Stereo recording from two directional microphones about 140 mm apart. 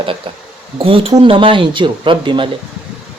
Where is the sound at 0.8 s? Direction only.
40° right (ahead or behind).